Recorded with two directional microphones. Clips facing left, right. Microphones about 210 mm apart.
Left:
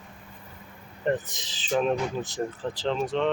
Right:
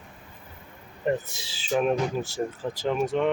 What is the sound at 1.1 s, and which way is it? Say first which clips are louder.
Speech: even; 10° right (ahead or behind).